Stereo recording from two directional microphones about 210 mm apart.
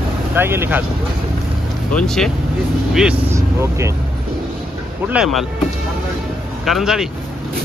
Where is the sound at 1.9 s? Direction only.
5° left (ahead or behind).